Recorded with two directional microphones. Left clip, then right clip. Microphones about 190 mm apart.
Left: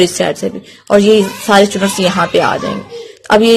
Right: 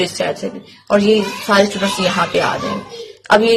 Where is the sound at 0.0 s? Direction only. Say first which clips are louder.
Left 6 dB; 45° left (ahead or behind).